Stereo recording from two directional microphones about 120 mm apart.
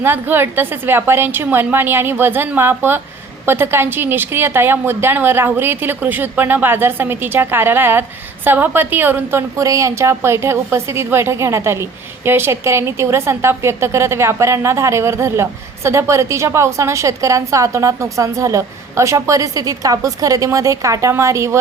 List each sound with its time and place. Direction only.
0.0 s a woman's voice: 20° right (ahead or behind)